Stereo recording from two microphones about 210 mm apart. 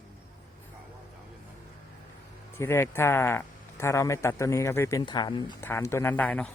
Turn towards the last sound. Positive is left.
turn(degrees=5)  # may be behind; listen again after turning